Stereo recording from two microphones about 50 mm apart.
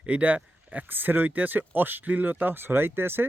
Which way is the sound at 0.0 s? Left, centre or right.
Right.